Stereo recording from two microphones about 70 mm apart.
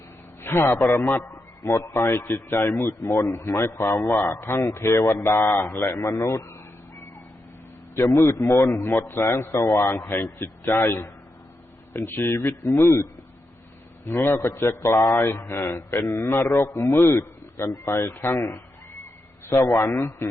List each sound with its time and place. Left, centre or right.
0.4 s a man's voice: left
6.0 s a man's voice: left
7.9 s a man's voice: left